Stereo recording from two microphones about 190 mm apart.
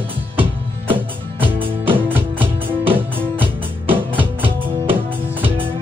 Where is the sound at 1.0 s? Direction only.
10° right (ahead or behind).